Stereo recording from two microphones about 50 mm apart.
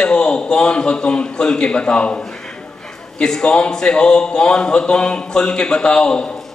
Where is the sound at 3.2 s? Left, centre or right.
Centre.